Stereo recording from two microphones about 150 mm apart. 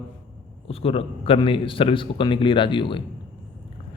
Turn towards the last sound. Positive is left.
turn(degrees=35)  # may be behind; listen again after turning